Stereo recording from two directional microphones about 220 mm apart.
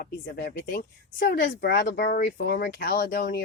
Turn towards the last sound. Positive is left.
turn(degrees=40)  # may be behind; listen again after turning